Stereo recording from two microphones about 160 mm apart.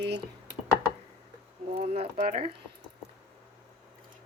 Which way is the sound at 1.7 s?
40° right (ahead or behind).